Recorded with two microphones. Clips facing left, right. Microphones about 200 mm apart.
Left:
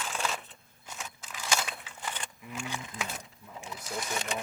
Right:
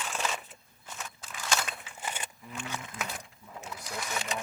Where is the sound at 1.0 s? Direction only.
10° left (ahead or behind).